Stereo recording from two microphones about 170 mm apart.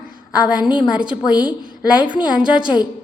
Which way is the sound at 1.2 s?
25° left (ahead or behind).